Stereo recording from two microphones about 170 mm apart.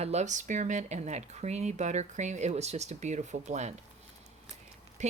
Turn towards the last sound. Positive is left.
turn(degrees=-40)  # may be behind; listen again after turning